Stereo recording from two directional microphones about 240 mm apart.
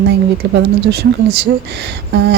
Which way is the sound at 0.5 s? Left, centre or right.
Right.